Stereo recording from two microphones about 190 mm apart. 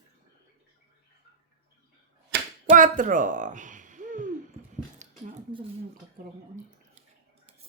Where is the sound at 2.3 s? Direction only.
60° right (ahead or behind).